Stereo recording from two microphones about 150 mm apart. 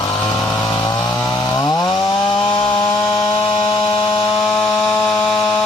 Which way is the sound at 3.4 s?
35° left (ahead or behind).